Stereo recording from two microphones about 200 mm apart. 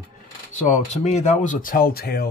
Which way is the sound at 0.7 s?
35° left (ahead or behind).